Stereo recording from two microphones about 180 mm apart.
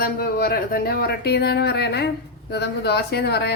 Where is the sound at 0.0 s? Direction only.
55° left (ahead or behind).